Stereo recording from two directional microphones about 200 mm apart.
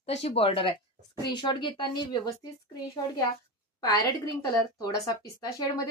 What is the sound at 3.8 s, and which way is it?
A woman's voice, 15° left (ahead or behind).